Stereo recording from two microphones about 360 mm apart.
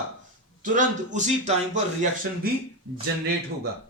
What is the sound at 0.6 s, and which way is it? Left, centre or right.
A man's voice, right.